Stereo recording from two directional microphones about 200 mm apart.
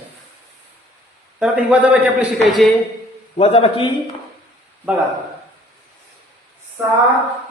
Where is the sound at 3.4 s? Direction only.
30° left (ahead or behind).